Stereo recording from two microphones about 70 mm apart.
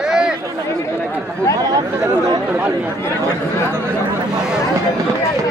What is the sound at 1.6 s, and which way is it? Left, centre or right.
Speech, right.